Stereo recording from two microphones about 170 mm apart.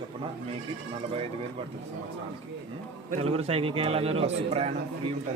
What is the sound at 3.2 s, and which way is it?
A man's voice, 35° right (ahead or behind).